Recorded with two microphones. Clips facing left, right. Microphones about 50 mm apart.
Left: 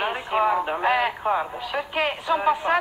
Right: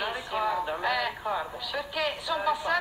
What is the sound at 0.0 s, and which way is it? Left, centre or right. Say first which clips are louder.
A woman's voice: left 7 dB; left.